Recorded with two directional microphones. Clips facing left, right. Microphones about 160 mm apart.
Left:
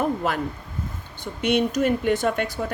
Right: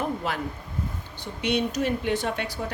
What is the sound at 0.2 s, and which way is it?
Speech, 45° left (ahead or behind).